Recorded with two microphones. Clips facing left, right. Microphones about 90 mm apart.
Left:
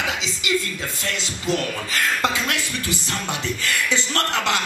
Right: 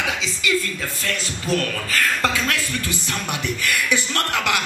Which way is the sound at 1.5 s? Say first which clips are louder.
Right 1 dB; 15° left (ahead or behind).